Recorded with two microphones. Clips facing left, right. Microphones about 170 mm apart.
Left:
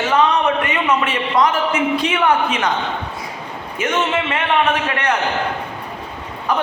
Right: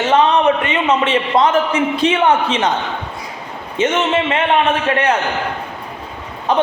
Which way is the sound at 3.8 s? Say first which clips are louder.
Right 6 dB; 25° right (ahead or behind).